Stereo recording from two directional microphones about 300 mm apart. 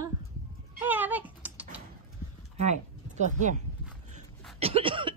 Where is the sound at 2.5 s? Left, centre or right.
Right.